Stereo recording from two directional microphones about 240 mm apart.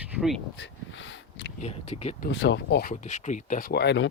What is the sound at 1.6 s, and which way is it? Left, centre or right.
Speech, left.